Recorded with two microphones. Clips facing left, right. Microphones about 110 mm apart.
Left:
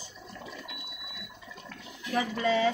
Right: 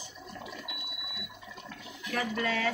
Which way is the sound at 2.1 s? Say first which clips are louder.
Left 4 dB; 20° left (ahead or behind).